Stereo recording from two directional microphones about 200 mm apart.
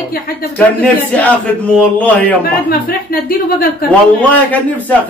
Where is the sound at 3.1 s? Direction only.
45° left (ahead or behind).